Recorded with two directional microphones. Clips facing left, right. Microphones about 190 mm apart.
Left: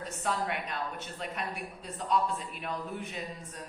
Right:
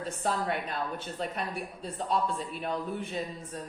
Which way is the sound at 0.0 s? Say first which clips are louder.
Right 2 dB; 35° right (ahead or behind).